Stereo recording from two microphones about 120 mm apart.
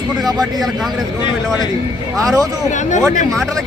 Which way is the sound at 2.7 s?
90° left.